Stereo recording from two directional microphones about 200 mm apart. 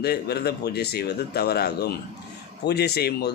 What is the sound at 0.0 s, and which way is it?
Speech, 50° left (ahead or behind).